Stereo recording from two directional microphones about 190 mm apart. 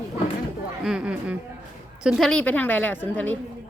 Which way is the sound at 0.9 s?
5° right (ahead or behind).